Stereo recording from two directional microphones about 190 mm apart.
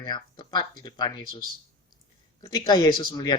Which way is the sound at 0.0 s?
25° left (ahead or behind).